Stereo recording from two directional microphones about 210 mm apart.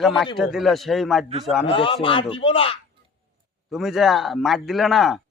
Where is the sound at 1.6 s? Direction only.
25° left (ahead or behind).